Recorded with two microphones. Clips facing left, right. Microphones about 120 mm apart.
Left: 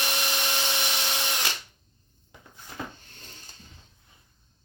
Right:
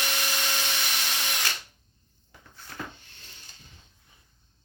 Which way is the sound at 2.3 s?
15° left (ahead or behind).